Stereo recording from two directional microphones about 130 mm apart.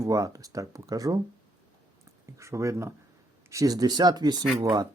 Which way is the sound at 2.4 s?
25° right (ahead or behind).